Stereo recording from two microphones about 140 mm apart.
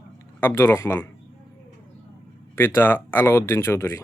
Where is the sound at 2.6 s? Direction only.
15° left (ahead or behind).